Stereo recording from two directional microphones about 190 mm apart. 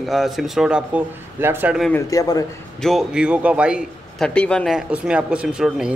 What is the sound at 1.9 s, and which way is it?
Speech, 20° left (ahead or behind).